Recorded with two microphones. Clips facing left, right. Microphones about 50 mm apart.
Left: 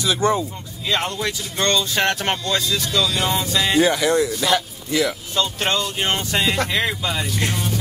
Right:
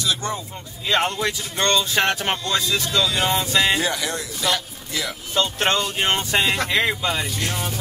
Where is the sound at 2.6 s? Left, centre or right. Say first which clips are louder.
Even; centre.